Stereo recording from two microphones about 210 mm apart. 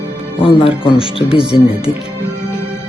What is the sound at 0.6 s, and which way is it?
Speech, 25° left (ahead or behind).